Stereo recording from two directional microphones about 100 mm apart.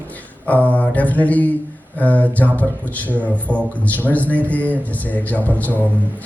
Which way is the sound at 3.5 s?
10° left (ahead or behind).